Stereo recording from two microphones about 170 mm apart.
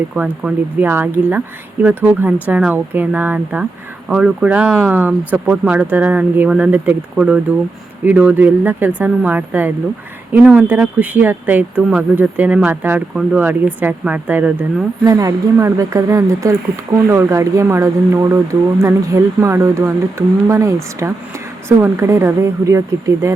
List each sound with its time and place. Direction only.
0.1 s speech: 5° right (ahead or behind)
15.0 s speech: 20° right (ahead or behind)